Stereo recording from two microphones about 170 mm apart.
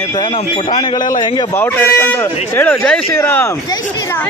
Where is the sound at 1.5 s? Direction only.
10° left (ahead or behind).